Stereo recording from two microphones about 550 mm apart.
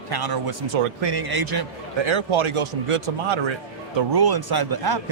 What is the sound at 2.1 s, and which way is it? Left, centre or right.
A man's voice, right.